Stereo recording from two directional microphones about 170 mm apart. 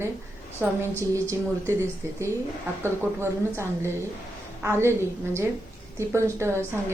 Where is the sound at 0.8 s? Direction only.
15° right (ahead or behind).